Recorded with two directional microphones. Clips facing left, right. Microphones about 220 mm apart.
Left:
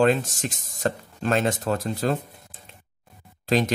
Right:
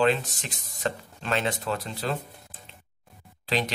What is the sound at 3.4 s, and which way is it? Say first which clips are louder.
Speech: left 6 dB; 45° left (ahead or behind).